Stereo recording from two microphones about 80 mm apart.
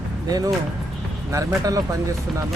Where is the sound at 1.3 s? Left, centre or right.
Right.